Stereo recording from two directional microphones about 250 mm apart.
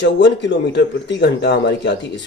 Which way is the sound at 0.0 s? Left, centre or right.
Left.